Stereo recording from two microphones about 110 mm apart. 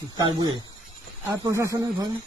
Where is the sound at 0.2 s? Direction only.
40° right (ahead or behind).